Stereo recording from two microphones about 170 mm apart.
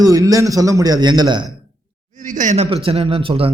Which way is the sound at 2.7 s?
35° right (ahead or behind).